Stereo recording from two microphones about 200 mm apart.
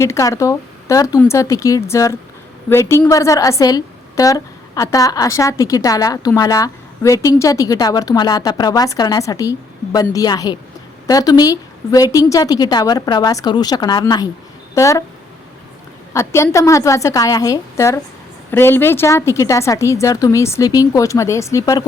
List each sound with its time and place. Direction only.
0.0 s a woman's voice: 15° left (ahead or behind)
16.1 s a woman's voice: 15° left (ahead or behind)